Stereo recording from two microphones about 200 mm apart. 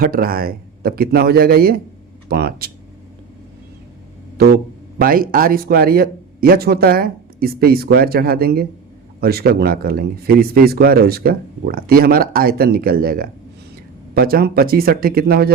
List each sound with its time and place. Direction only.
0.0 s speech: 45° right (ahead or behind)
4.9 s speech: 45° right (ahead or behind)